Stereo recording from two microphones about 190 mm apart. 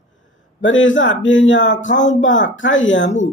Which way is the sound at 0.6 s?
85° left.